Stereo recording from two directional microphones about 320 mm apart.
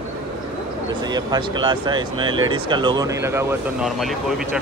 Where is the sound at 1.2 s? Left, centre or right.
Centre.